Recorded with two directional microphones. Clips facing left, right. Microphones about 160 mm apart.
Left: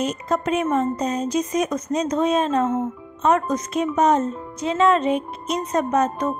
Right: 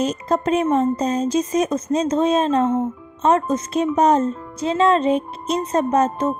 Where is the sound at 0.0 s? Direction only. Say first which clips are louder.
Right 3 dB; 30° right (ahead or behind).